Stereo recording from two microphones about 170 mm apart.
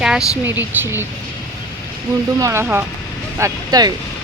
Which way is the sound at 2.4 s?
15° right (ahead or behind).